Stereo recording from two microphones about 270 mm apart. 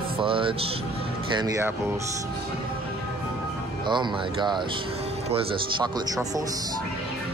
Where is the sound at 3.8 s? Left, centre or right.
Centre.